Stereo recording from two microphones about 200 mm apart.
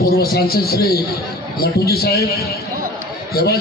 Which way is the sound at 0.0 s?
50° left (ahead or behind).